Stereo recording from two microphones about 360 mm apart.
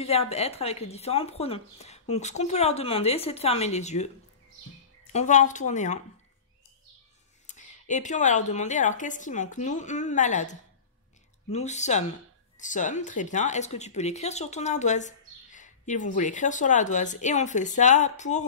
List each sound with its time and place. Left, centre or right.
0.0 s speech: centre
7.4 s speech: centre